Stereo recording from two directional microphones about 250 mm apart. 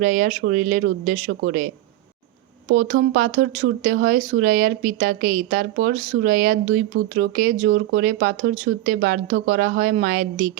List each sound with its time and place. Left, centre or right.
0.0 s speech: right
2.7 s speech: right